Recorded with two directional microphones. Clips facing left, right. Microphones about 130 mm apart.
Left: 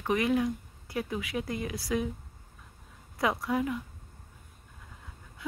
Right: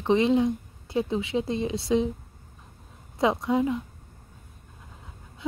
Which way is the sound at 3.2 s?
25° right (ahead or behind).